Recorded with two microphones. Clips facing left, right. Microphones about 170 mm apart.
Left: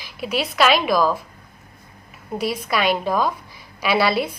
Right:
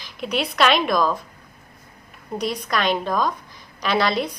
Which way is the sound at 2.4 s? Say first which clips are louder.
Left 2 dB; 5° left (ahead or behind).